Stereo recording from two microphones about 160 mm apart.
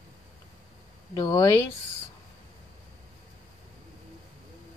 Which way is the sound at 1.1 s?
25° left (ahead or behind).